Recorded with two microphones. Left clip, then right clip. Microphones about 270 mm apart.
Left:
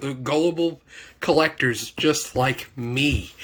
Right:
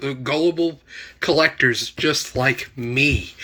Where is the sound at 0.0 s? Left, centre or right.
Centre.